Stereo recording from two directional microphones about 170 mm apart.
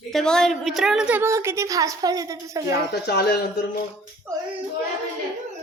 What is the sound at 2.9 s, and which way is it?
Speech, 70° left (ahead or behind).